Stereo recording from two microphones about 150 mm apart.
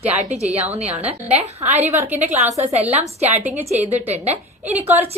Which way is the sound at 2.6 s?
45° right (ahead or behind).